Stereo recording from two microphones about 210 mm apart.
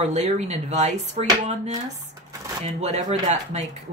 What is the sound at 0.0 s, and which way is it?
Speech, 30° right (ahead or behind).